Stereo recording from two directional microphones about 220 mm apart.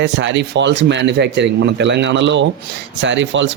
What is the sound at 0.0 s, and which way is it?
Speech, 55° right (ahead or behind).